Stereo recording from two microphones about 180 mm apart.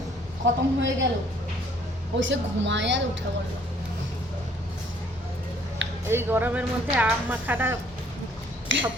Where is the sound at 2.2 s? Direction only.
90° right.